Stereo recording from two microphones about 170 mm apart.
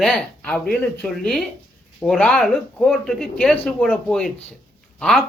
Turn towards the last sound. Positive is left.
turn(degrees=5)  # may be behind; listen again after turning